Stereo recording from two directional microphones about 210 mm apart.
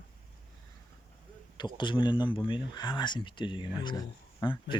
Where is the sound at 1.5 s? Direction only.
20° left (ahead or behind).